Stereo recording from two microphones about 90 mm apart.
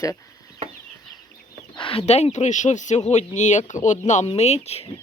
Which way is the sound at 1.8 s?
90° left.